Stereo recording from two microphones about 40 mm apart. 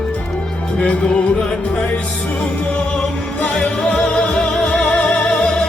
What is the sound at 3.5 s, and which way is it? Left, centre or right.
Music, centre.